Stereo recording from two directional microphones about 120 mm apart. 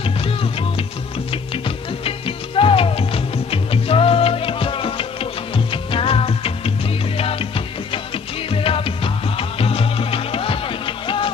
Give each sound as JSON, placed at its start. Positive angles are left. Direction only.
{"t": 0.0, "sound": "music", "side_deg": 50}
{"t": 2.0, "sound": "music", "side_deg": 50}